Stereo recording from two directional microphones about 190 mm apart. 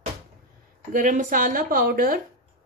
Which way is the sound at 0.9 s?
45° right (ahead or behind).